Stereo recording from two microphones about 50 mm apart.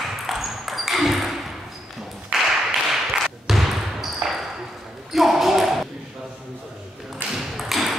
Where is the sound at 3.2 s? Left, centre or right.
Centre.